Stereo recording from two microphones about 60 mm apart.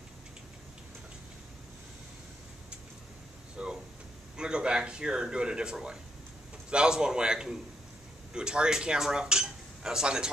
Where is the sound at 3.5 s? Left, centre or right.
Centre.